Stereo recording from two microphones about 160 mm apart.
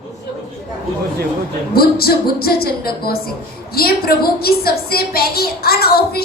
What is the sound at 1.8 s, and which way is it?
A woman's voice, 70° left (ahead or behind).